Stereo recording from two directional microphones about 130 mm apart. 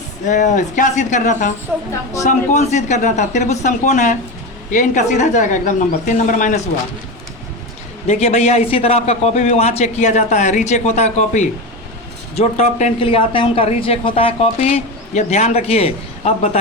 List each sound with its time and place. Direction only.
0.3 s speech: 70° left (ahead or behind)
8.0 s a man's voice: 60° left (ahead or behind)
12.4 s a man's voice: 50° left (ahead or behind)